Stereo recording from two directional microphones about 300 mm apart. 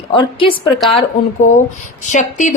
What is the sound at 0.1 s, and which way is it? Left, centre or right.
A woman's voice, centre.